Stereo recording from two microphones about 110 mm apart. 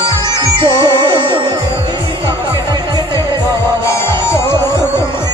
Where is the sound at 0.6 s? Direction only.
50° right (ahead or behind).